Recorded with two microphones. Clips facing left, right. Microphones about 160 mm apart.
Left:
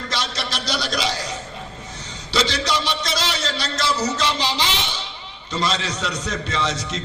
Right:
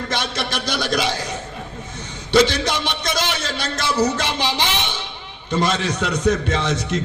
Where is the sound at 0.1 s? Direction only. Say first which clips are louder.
Right 1 dB; 55° right (ahead or behind).